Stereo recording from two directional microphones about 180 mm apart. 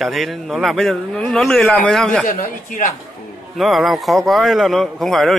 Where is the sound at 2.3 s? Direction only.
50° left (ahead or behind).